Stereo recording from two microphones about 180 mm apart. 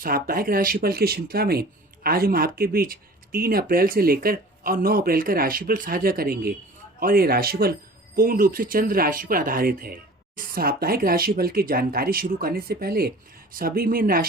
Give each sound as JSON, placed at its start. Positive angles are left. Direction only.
{"t": 0.0, "sound": "speech", "side_deg": -55}